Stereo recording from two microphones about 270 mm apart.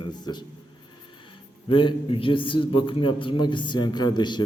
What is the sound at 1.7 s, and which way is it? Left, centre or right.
A man's voice, centre.